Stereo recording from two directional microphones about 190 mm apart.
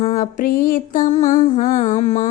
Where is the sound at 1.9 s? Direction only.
40° left (ahead or behind).